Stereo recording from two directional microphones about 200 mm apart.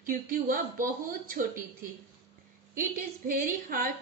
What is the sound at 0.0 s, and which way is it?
A woman's voice, 45° right (ahead or behind).